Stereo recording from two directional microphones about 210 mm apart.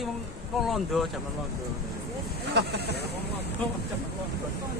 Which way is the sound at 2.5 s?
50° right (ahead or behind).